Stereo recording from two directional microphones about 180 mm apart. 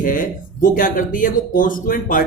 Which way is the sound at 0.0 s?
50° left (ahead or behind).